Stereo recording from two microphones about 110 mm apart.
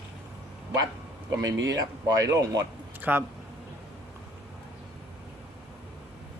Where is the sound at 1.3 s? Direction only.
35° right (ahead or behind).